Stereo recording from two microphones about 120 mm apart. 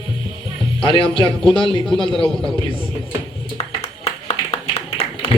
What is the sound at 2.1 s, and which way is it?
Speech, 5° left (ahead or behind).